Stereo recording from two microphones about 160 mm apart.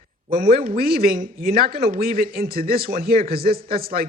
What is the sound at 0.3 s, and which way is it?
Speech, 65° right (ahead or behind).